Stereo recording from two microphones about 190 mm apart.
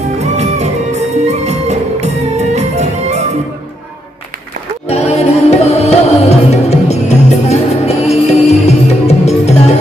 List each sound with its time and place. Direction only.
0.2 s music: 35° right (ahead or behind)
4.9 s music: 35° left (ahead or behind)